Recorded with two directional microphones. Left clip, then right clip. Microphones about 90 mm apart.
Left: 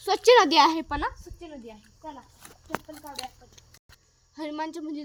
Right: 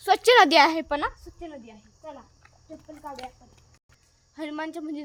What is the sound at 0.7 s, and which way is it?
Speech, 20° right (ahead or behind).